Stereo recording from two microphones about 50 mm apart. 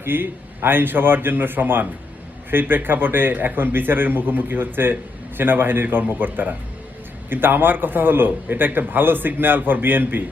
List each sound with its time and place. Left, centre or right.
0.0 s a man's voice: right